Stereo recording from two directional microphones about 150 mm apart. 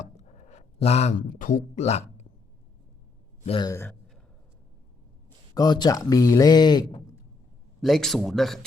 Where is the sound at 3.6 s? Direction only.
20° left (ahead or behind).